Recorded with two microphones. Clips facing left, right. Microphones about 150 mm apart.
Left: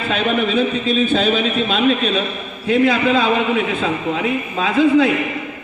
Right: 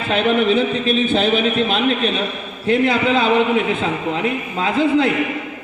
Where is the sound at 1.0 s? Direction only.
20° right (ahead or behind).